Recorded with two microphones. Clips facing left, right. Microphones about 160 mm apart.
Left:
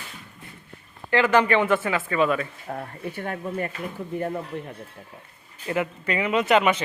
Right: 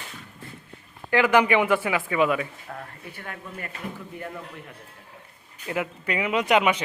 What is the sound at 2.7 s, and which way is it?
Speech, 35° left (ahead or behind).